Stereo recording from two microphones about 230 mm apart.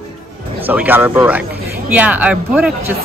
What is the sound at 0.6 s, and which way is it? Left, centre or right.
Speech, centre.